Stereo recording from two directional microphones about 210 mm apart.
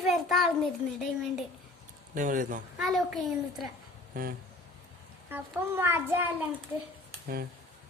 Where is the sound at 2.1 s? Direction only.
40° right (ahead or behind).